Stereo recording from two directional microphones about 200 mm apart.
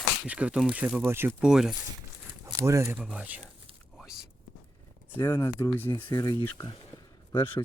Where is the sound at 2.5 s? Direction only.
15° right (ahead or behind).